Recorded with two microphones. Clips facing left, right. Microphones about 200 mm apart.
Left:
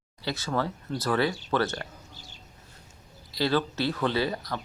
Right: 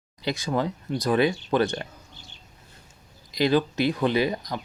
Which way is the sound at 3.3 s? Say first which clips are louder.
Right 4 dB; 15° right (ahead or behind).